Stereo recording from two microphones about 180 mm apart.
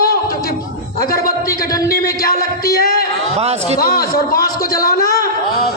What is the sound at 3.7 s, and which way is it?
Speech, 55° left (ahead or behind).